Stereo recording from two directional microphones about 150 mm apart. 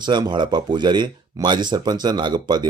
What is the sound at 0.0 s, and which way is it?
Speech, 30° right (ahead or behind).